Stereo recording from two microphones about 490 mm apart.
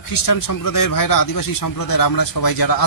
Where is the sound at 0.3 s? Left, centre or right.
Left.